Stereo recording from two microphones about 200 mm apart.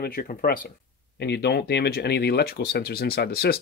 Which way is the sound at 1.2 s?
55° left (ahead or behind).